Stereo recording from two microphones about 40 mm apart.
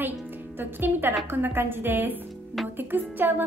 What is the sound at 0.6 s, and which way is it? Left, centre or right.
A woman's voice, right.